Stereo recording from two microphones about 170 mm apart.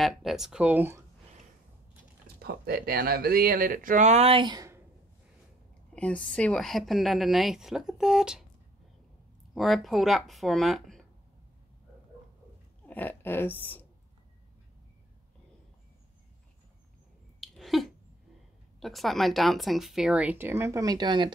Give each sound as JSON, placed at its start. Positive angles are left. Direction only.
{"t": 0.0, "sound": "a woman's voice", "side_deg": 0}
{"t": 2.2, "sound": "speech", "side_deg": -65}
{"t": 5.9, "sound": "a woman's voice", "side_deg": 5}
{"t": 9.5, "sound": "a woman's voice", "side_deg": 0}
{"t": 12.8, "sound": "speech", "side_deg": 10}
{"t": 17.4, "sound": "a sound", "side_deg": 0}
{"t": 18.8, "sound": "a woman's voice", "side_deg": 0}